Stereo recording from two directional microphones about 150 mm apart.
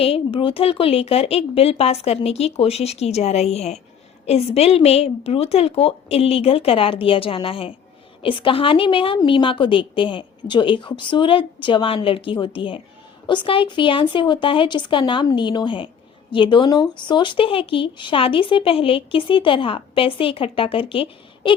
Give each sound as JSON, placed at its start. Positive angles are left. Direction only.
{"t": 0.0, "sound": "a woman's voice", "side_deg": 40}